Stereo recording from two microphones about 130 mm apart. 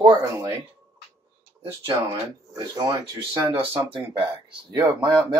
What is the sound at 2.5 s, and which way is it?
Speech, 30° right (ahead or behind).